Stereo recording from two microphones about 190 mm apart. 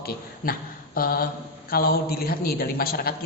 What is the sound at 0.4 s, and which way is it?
A man's voice, 50° left (ahead or behind).